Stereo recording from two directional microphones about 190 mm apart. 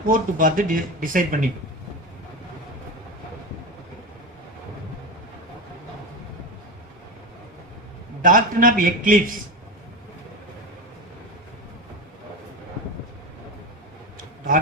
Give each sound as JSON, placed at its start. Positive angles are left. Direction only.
{"t": 0.1, "sound": "speech", "side_deg": -45}
{"t": 8.2, "sound": "speech", "side_deg": -45}
{"t": 14.2, "sound": "a sound", "side_deg": -45}